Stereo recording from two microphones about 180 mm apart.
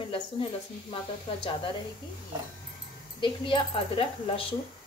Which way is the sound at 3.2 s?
25° left (ahead or behind).